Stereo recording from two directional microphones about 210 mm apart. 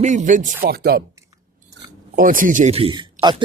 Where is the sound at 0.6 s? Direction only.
50° right (ahead or behind).